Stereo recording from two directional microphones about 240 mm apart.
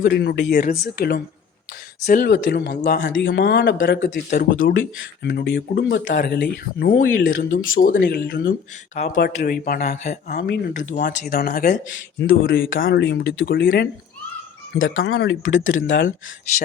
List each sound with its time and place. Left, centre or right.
0.0 s speech: left
2.3 s speech: left
6.1 s speech: left
9.0 s speech: left
14.8 s speech: left